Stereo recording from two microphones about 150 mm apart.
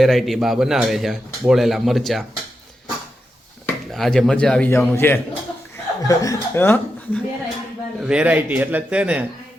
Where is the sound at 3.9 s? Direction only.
Centre (ahead or behind).